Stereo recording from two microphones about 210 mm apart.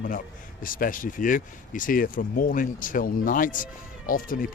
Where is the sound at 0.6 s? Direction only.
40° left (ahead or behind).